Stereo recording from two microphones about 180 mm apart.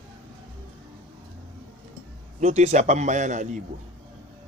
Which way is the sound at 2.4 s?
40° right (ahead or behind).